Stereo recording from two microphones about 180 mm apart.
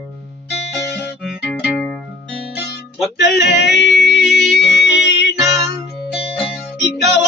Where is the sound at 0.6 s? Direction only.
70° left (ahead or behind).